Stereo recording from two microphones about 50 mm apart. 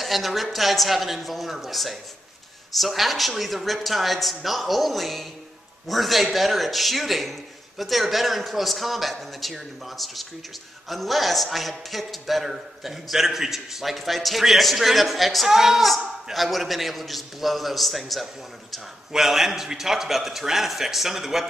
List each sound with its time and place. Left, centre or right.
0.0 s a man's voice: centre